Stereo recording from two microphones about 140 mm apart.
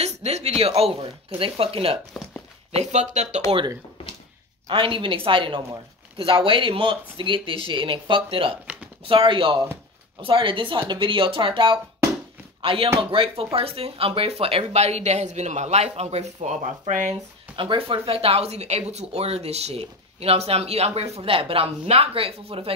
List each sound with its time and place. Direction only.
0.0 s speech: 50° right (ahead or behind)
2.7 s speech: 55° right (ahead or behind)
4.6 s speech: 35° right (ahead or behind); by 17.1 s 55° right (ahead or behind)
17.6 s speech: 40° right (ahead or behind)